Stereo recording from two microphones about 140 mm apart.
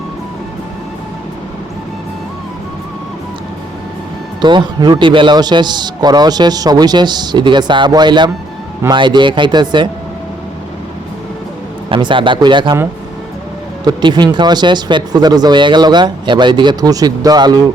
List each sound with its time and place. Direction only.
4.4 s a man's voice: 35° right (ahead or behind)
11.9 s a man's voice: 35° right (ahead or behind)
13.8 s a man's voice: 30° right (ahead or behind)